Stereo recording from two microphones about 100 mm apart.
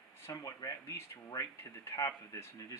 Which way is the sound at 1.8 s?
30° left (ahead or behind).